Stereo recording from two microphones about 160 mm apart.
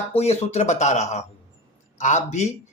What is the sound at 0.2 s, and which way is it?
Speech, 40° left (ahead or behind).